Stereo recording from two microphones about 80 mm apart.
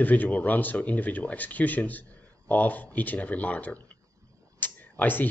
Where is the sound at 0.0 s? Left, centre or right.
Centre.